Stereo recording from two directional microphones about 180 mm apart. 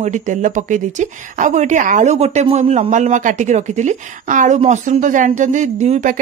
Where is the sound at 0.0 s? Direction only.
45° right (ahead or behind).